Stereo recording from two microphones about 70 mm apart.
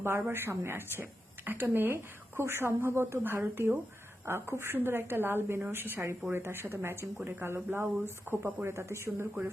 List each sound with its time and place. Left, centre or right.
0.0 s a woman's voice: right